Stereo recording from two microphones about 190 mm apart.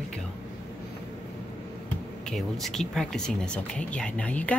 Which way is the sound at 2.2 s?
Centre (ahead or behind).